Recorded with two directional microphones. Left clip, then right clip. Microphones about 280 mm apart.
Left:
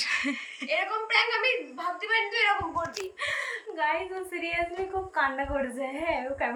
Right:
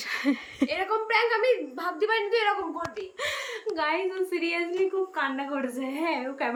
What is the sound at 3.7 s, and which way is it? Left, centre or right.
Speech, centre.